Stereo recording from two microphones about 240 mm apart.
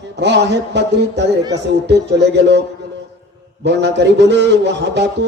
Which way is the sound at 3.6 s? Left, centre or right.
Right.